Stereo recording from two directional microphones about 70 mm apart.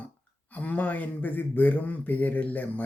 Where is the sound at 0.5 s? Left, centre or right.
Left.